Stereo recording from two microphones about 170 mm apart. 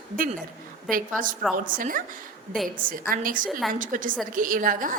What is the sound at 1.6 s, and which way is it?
A woman's voice, 55° right (ahead or behind).